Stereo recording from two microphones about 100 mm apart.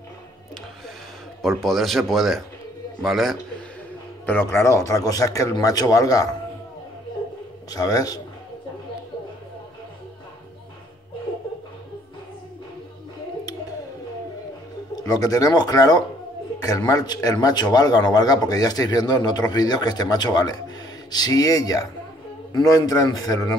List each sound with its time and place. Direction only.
1.4 s a man's voice: centre (ahead or behind)
4.3 s a man's voice: 20° left (ahead or behind)
7.7 s a man's voice: 40° left (ahead or behind)
15.0 s a man's voice: 40° left (ahead or behind)